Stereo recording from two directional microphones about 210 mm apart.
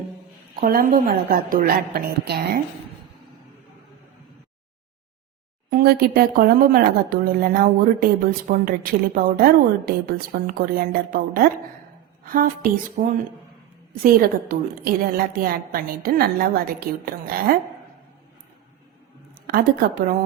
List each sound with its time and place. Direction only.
0.5 s a woman's voice: 40° right (ahead or behind)
5.7 s a woman's voice: 45° right (ahead or behind)
19.3 s a woman's voice: 45° right (ahead or behind)